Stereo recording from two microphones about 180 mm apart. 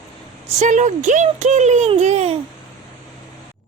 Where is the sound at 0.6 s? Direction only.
45° right (ahead or behind).